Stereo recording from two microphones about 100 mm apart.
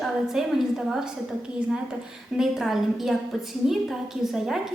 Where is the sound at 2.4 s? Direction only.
5° right (ahead or behind).